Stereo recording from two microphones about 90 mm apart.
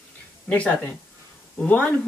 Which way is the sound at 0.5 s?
15° left (ahead or behind).